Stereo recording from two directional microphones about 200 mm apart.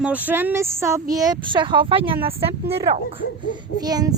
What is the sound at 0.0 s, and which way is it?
Speech, 10° right (ahead or behind).